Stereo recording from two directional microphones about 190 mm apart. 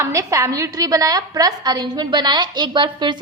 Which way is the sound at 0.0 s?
15° right (ahead or behind).